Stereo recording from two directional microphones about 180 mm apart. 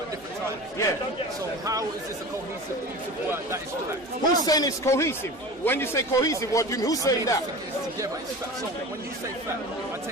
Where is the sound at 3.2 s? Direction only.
15° right (ahead or behind).